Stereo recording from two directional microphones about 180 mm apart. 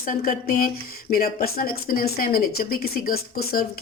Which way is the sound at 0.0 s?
50° left (ahead or behind).